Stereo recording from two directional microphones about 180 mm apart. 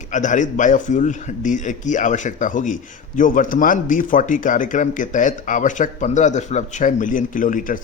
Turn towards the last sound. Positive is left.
turn(degrees=50)  # may be behind; listen again after turning